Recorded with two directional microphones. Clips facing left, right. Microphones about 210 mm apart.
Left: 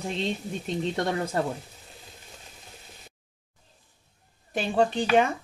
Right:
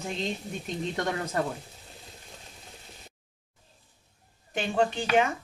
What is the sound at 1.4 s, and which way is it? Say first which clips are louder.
Speech: left 1 dB; 30° left (ahead or behind).